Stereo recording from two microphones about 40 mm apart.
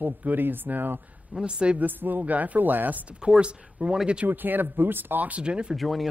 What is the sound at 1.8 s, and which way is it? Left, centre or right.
Speech, right.